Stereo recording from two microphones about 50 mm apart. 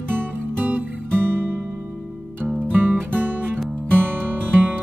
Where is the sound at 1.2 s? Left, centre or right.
Right.